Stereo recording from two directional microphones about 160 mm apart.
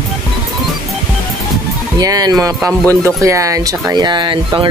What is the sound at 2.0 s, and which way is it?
Speech, 25° right (ahead or behind).